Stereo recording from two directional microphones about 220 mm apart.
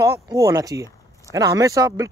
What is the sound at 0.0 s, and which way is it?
Speech, 15° right (ahead or behind).